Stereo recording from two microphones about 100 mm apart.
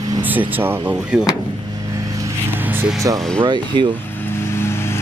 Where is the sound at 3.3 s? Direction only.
50° right (ahead or behind).